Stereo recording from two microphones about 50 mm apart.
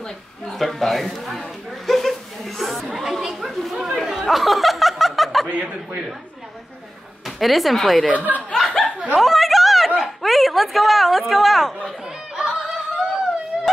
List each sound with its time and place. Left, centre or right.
0.5 s speech: centre
1.9 s chatter: centre
3.8 s a sound: centre
5.5 s chuckle: right
7.2 s speech: centre
8.4 s chuckle: centre
9.1 s a sound: centre
9.9 s speech: centre
12.4 s yodeling: centre